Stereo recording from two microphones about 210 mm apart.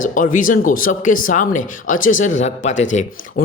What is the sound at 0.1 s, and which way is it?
Speech, 40° left (ahead or behind).